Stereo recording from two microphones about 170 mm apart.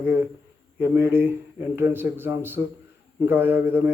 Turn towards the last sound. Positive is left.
turn(degrees=-10)  # may be behind; listen again after turning